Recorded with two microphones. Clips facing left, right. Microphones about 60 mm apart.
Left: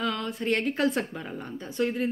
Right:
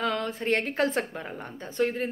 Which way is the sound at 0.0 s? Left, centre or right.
Right.